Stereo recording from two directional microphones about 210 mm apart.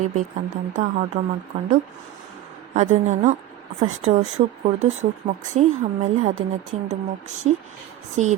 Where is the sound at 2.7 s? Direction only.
35° right (ahead or behind).